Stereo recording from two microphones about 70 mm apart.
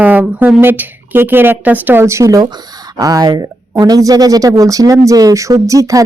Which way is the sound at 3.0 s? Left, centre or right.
Right.